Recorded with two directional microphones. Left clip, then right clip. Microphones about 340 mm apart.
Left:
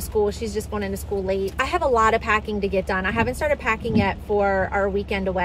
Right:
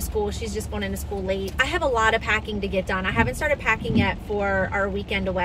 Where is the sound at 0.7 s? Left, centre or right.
Centre.